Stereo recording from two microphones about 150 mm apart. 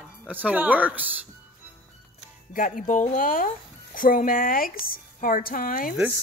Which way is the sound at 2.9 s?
60° left (ahead or behind).